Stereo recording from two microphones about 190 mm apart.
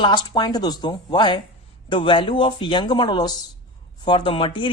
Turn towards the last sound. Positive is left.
turn(degrees=25)  # may be behind; listen again after turning